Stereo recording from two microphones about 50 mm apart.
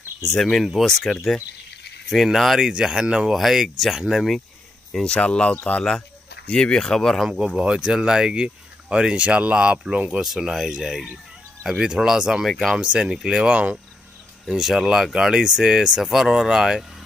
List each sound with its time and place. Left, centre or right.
0.4 s speech: centre
3.3 s speech: centre
5.0 s speech: centre
7.2 s speech: centre
10.2 s speech: centre
12.4 s speech: centre
12.7 s speech: right
13.1 s speech: centre
13.4 s speech: right
14.5 s speech: centre